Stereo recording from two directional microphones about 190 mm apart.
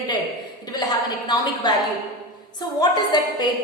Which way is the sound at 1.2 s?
20° left (ahead or behind).